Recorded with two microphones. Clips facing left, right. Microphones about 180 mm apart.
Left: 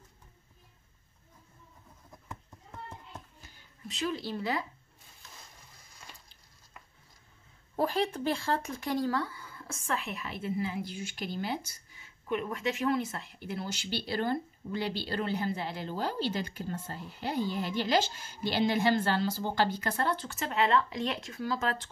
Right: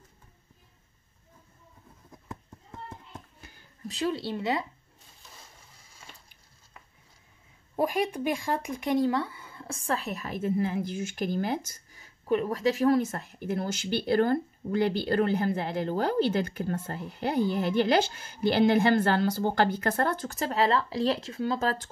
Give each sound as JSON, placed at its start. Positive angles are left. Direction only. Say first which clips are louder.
{"t": 3.3, "sound": "a sound", "louder": "right 4 dB", "side_deg": -55}
{"t": 3.8, "sound": "speech", "louder": "right 4 dB", "side_deg": -35}
{"t": 7.7, "sound": "speech", "louder": "right 2 dB", "side_deg": -15}